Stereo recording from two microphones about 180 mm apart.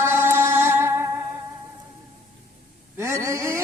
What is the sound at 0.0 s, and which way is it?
Music, 15° right (ahead or behind).